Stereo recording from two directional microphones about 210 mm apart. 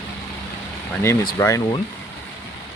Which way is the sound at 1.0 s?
10° left (ahead or behind).